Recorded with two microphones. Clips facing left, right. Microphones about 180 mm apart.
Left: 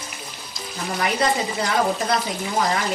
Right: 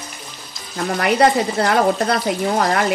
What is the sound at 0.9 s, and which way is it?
Speech, 65° right (ahead or behind).